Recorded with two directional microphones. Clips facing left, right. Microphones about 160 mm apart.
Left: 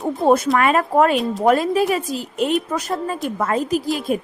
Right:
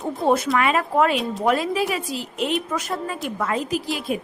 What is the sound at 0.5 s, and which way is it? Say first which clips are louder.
A woman's voice: left 4 dB; 45° left (ahead or behind).